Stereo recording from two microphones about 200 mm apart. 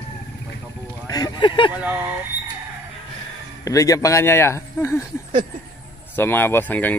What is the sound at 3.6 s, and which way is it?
Speech, 15° left (ahead or behind).